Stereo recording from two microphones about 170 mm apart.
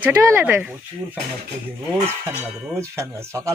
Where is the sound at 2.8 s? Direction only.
15° right (ahead or behind).